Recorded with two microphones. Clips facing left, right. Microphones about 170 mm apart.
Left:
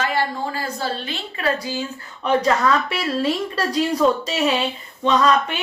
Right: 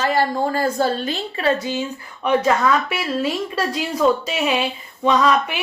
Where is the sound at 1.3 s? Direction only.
25° right (ahead or behind).